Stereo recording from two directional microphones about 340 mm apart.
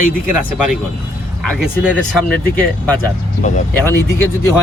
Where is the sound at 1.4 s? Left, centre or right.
Centre.